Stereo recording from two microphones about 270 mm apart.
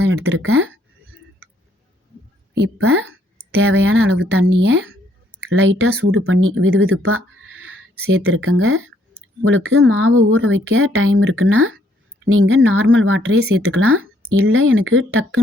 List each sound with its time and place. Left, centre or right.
0.0 s speech: right
3.6 s speech: right